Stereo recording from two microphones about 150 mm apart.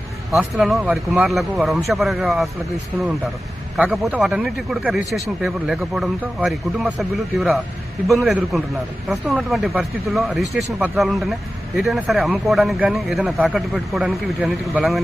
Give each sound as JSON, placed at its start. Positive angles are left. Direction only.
{"t": 0.3, "sound": "speech", "side_deg": 0}
{"t": 3.8, "sound": "speech", "side_deg": -5}